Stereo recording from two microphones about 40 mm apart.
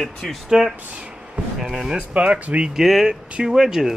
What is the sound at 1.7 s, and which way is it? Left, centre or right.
Speech, centre.